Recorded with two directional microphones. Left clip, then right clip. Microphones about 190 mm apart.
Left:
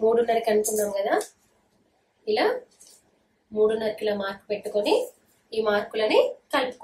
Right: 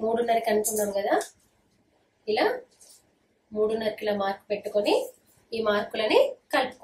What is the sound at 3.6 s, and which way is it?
A woman's voice, 10° left (ahead or behind).